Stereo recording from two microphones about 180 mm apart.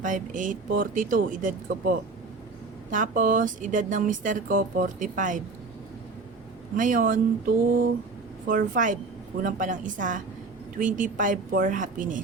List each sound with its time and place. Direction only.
0.0 s speech: 45° right (ahead or behind)
6.7 s speech: 45° right (ahead or behind)